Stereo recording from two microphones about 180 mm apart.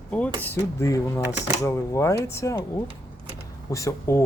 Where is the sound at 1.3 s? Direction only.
5° right (ahead or behind).